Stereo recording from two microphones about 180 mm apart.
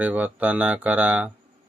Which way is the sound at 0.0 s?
10° right (ahead or behind).